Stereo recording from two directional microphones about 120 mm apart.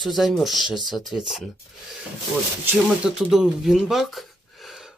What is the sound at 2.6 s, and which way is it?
Speech, 5° right (ahead or behind).